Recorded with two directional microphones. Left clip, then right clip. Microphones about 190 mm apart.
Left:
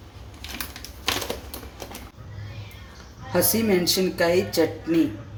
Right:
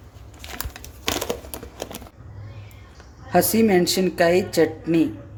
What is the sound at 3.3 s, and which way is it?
Speech, 50° right (ahead or behind).